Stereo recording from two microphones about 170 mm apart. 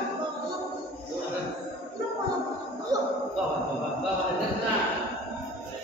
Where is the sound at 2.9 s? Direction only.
20° right (ahead or behind).